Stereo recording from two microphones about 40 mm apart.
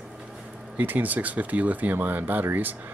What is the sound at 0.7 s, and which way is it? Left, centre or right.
Speech, right.